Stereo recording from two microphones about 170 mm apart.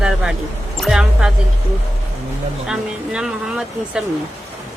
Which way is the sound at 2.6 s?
5° right (ahead or behind).